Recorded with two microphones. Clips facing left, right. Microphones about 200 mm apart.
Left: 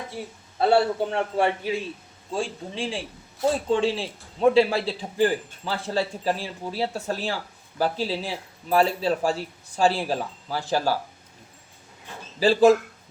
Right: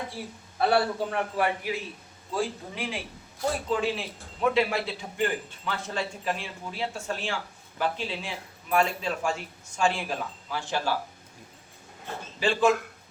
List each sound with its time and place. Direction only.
0.2 s a man's voice: 20° left (ahead or behind); by 10.9 s 35° left (ahead or behind)
12.4 s a man's voice: 35° left (ahead or behind)